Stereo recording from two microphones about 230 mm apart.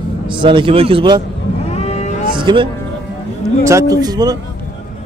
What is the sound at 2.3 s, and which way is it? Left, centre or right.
Music, right.